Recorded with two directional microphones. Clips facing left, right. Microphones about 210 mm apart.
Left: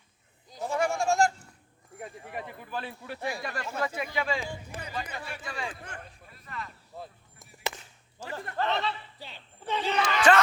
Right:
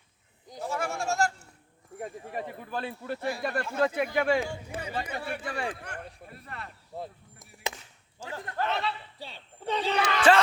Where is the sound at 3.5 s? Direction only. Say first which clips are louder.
Right 5 dB; 55° right (ahead or behind).